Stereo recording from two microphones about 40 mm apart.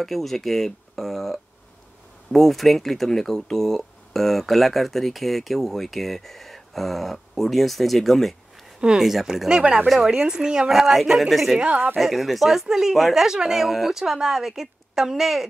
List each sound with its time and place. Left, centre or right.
0.0 s speech: centre
9.0 s speech: centre
10.7 s speech: centre